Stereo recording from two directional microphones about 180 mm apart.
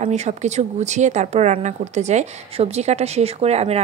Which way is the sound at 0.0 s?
40° right (ahead or behind).